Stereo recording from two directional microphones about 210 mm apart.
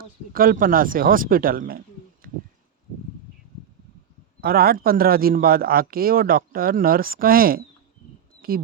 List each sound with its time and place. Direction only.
0.0 s speech: 45° right (ahead or behind)
4.4 s speech: 45° right (ahead or behind)
8.4 s a sound: 45° right (ahead or behind)